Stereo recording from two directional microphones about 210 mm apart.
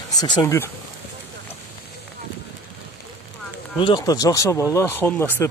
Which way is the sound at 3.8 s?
20° left (ahead or behind).